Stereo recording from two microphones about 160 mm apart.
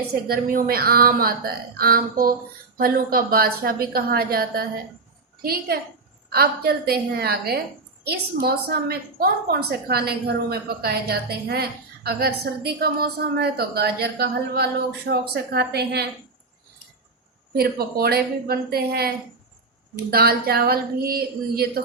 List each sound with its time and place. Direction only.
0.3 s a woman's voice: 65° right (ahead or behind); by 16.0 s 90° right
17.5 s speech: 70° right (ahead or behind)